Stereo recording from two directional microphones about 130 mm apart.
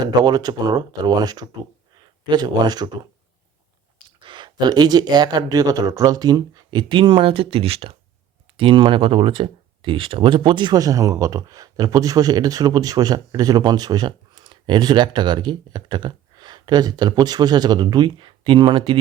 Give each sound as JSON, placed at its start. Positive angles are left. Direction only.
{"t": 0.0, "sound": "speech", "side_deg": -30}
{"t": 4.2, "sound": "speech", "side_deg": -40}